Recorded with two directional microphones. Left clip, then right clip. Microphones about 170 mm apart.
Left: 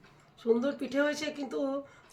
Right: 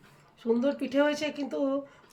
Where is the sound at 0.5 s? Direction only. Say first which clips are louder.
Right 4 dB; 20° left (ahead or behind).